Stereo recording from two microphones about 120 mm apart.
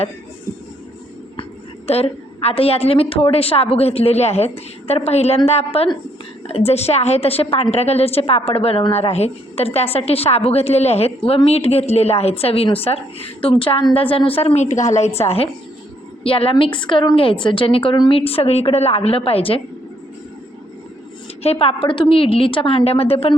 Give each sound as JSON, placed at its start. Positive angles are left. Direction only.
{"t": 1.9, "sound": "a woman's voice", "side_deg": 55}
{"t": 21.4, "sound": "a woman's voice", "side_deg": 55}